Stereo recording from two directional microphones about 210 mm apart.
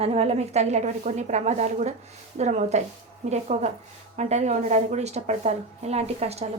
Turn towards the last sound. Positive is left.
turn(degrees=-30)  # may be behind; listen again after turning